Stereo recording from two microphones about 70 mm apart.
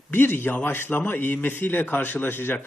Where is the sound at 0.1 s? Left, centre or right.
Left.